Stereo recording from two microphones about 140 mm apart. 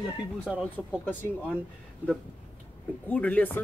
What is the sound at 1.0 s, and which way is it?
Speech, 15° left (ahead or behind).